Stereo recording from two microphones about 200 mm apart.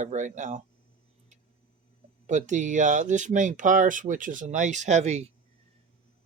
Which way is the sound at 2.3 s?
35° right (ahead or behind).